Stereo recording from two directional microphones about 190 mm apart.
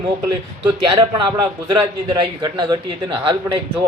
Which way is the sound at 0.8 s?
25° right (ahead or behind).